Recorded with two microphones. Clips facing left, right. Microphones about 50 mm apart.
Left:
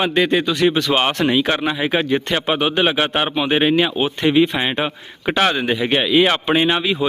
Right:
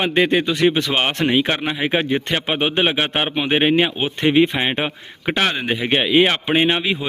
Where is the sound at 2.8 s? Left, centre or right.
Centre.